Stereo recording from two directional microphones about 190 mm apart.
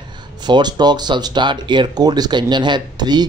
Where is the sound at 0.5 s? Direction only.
20° right (ahead or behind).